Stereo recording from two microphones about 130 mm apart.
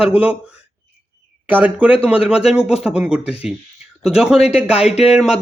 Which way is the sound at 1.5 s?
15° right (ahead or behind).